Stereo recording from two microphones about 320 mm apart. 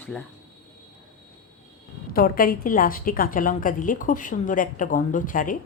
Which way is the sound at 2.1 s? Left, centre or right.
Left.